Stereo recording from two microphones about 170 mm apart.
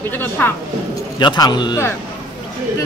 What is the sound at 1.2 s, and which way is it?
Speech, 25° left (ahead or behind).